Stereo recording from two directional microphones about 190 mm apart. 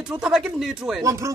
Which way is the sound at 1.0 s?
15° right (ahead or behind).